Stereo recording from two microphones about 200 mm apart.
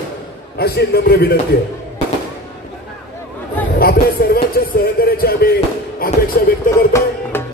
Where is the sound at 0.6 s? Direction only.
55° left (ahead or behind).